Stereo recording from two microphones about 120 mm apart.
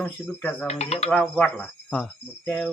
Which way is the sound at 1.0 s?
5° left (ahead or behind).